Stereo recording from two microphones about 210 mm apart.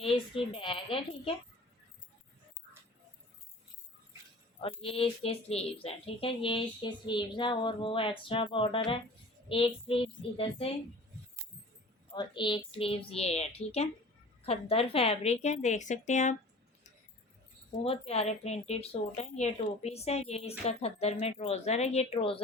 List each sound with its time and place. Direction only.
0.0 s speech: 25° left (ahead or behind)
4.6 s speech: 25° left (ahead or behind)
12.1 s speech: 20° left (ahead or behind)
17.8 s speech: 30° left (ahead or behind)